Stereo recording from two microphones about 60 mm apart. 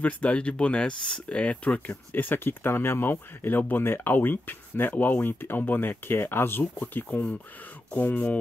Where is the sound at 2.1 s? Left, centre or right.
Left.